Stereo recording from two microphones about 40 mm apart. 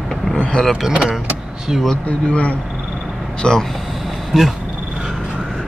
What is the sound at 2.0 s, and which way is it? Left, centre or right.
Speech, left.